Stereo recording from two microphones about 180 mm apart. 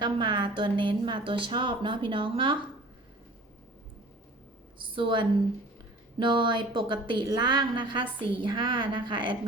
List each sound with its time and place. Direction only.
0.0 s a woman's voice: 25° right (ahead or behind)
4.8 s a woman's voice: 30° right (ahead or behind)